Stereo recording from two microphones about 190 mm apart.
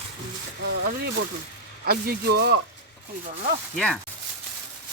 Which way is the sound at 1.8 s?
55° right (ahead or behind).